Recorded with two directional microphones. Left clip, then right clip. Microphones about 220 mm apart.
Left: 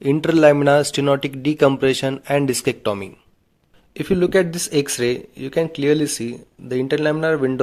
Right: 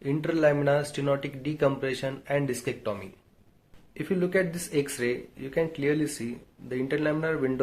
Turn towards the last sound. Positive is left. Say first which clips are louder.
# left 9 dB
turn(degrees=40)  # may be behind; listen again after turning